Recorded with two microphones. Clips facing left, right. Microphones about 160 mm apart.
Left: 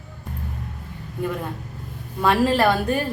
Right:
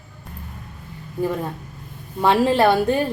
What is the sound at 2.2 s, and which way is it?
Speech, 25° right (ahead or behind).